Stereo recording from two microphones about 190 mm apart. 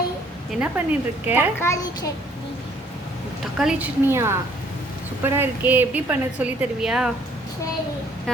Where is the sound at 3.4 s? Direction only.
5° right (ahead or behind).